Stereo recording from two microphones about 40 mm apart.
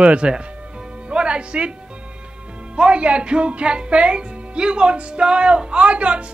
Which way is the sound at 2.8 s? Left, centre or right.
Right.